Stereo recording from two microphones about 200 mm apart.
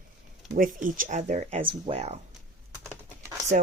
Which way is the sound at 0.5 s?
45° right (ahead or behind).